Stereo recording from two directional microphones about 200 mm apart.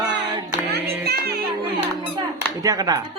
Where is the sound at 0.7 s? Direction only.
55° right (ahead or behind).